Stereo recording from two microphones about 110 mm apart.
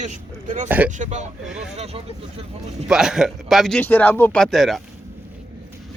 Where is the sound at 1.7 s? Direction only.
70° right (ahead or behind).